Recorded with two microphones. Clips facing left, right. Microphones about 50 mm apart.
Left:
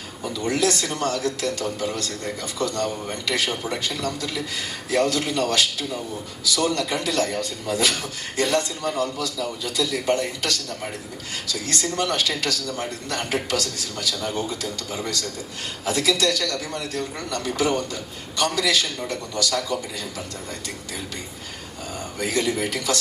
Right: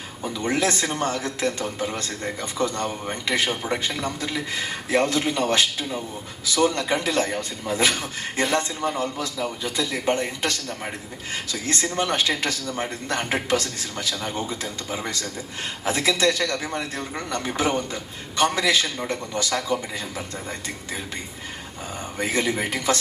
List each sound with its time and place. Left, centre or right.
0.4 s a man's voice: right
22.2 s a man's voice: right